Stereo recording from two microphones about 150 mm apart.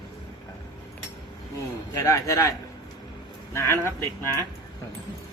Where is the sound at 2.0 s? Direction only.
20° left (ahead or behind).